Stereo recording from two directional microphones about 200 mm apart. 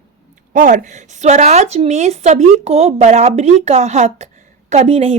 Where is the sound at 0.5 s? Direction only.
40° right (ahead or behind).